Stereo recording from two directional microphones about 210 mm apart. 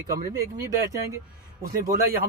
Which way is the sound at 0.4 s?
15° right (ahead or behind).